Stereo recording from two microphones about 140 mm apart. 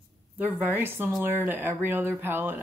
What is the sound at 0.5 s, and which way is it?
Speech, 15° right (ahead or behind).